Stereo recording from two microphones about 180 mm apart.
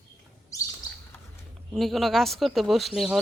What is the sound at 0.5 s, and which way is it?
Chirp, 20° left (ahead or behind).